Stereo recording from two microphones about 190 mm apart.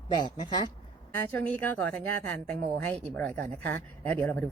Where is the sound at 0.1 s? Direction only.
25° left (ahead or behind).